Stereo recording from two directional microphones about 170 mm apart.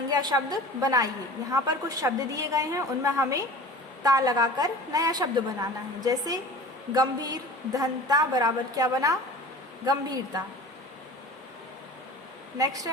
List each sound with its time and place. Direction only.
0.1 s a woman's voice: 25° right (ahead or behind)
12.5 s a woman's voice: 20° right (ahead or behind)